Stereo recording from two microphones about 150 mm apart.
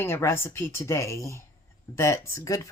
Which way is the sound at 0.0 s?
15° left (ahead or behind).